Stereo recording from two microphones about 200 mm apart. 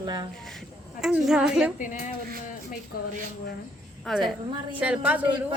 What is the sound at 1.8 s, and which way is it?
Speech, 40° left (ahead or behind).